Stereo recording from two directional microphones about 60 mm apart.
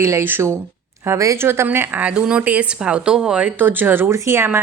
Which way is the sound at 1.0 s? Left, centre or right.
Right.